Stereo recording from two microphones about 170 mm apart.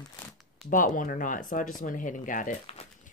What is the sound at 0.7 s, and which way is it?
Speech, 50° left (ahead or behind).